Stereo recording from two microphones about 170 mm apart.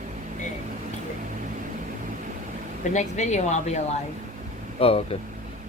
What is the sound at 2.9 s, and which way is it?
Speech, 45° left (ahead or behind).